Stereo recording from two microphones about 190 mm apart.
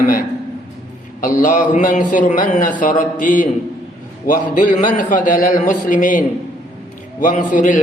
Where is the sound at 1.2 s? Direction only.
45° left (ahead or behind).